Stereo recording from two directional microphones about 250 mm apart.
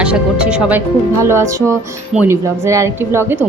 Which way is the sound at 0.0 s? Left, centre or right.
Centre.